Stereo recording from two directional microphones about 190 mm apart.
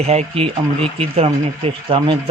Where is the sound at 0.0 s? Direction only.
35° right (ahead or behind).